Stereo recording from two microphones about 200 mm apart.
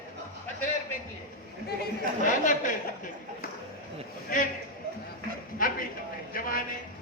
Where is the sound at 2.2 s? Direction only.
40° left (ahead or behind).